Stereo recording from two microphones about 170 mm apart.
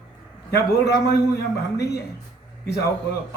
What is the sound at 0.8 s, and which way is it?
Speech, 80° left.